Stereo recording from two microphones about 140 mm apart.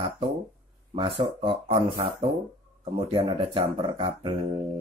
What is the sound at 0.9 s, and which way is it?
Speech, 40° right (ahead or behind).